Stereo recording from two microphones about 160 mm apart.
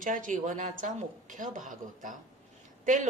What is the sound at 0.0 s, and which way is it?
A woman's voice, 55° right (ahead or behind).